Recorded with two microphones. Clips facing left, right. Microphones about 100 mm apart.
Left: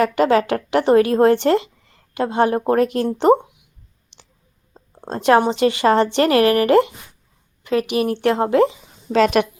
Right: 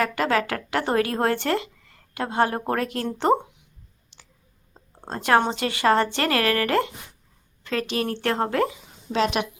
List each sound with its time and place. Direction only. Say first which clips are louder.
0.0 s a woman's voice: left 7 dB; 25° left (ahead or behind)
4.9 s a woman's voice: left 5 dB; 20° left (ahead or behind)
9.1 s a woman's voice: left 8 dB; 50° left (ahead or behind)